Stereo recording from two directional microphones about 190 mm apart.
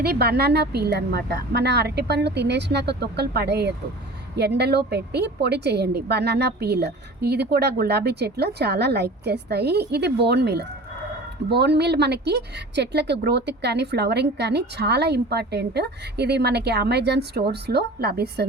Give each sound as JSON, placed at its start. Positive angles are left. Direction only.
{"t": 0.0, "sound": "speech", "side_deg": -55}